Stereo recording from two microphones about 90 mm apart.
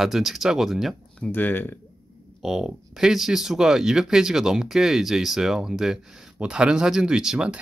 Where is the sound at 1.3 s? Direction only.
20° left (ahead or behind).